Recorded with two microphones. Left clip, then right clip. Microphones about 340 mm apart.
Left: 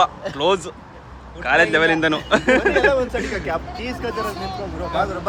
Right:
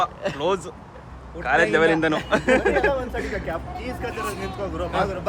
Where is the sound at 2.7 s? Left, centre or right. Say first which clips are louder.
Left 5 dB; left.